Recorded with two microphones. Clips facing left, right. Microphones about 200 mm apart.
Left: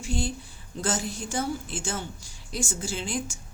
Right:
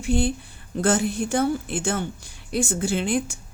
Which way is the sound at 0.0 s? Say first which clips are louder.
Right 8 dB; 60° right (ahead or behind).